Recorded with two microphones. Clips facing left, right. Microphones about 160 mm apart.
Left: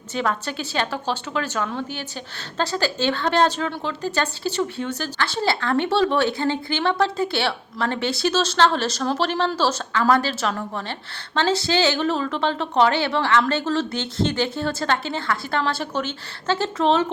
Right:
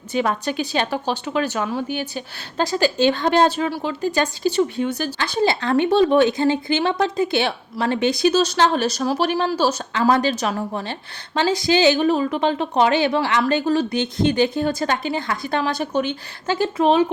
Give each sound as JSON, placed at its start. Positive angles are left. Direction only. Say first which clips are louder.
{"t": 0.1, "sound": "a woman's voice", "louder": "right 3 dB", "side_deg": -15}